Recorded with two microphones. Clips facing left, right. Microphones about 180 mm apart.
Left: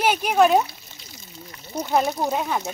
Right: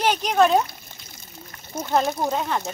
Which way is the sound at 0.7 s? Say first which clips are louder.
Right 1 dB; 50° right (ahead or behind).